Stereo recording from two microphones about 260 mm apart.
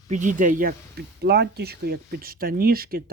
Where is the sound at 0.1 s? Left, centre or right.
Right.